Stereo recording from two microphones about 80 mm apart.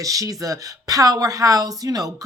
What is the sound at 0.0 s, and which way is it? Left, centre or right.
Speech, right.